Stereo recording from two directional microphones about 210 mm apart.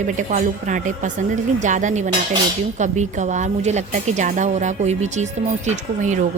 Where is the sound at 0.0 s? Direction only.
35° right (ahead or behind).